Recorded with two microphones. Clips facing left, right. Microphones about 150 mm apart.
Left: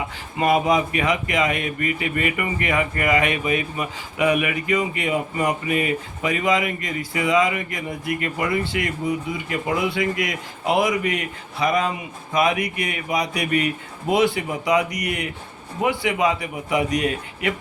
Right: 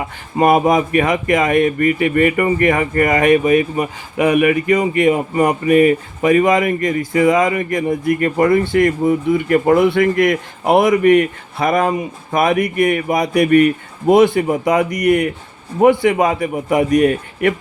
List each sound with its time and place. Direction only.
0.3 s speech: 50° right (ahead or behind)